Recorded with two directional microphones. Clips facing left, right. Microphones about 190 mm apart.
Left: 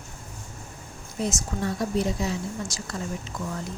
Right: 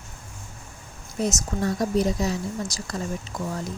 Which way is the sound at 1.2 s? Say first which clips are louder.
Right 3 dB; 40° right (ahead or behind).